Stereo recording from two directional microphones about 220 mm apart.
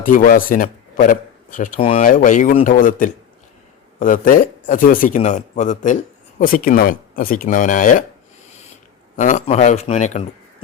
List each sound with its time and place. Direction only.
0.0 s speech: 40° left (ahead or behind)
9.1 s speech: 35° left (ahead or behind)